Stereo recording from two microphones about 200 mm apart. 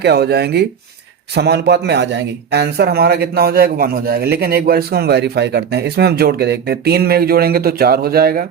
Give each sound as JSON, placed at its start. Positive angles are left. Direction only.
{"t": 0.0, "sound": "speech", "side_deg": -55}